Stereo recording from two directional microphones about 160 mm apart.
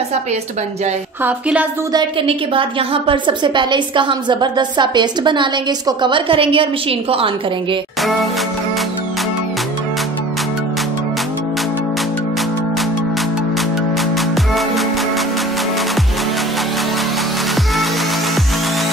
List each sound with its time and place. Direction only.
1.2 s a woman's voice: 10° right (ahead or behind)
1.9 s a woman's voice: 30° right (ahead or behind)
14.1 s music: centre (ahead or behind)